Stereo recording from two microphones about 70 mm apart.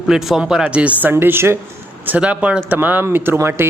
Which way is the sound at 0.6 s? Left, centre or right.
Centre.